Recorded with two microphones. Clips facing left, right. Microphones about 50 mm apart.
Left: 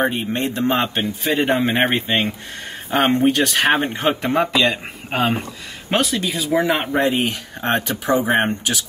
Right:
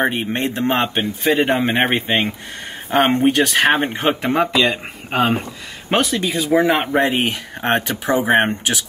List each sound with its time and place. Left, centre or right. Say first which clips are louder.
0.1 s speech: right 1 dB; right
0.6 s speech: right 1 dB; centre
7.1 s speech: even; right
7.8 s speech: even; centre